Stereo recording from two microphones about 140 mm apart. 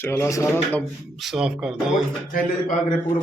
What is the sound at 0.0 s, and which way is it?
Speech, 20° left (ahead or behind).